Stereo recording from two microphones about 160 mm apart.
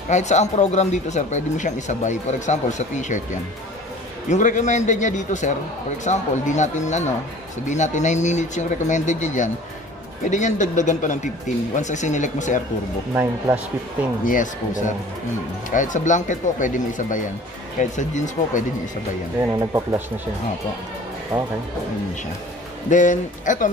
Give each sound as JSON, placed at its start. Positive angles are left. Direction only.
{"t": 0.1, "sound": "speech", "side_deg": 45}
{"t": 4.3, "sound": "speech", "side_deg": 50}
{"t": 13.1, "sound": "speech", "side_deg": -15}
{"t": 14.2, "sound": "speech", "side_deg": 55}
{"t": 19.4, "sound": "speech", "side_deg": -15}
{"t": 22.8, "sound": "speech", "side_deg": 50}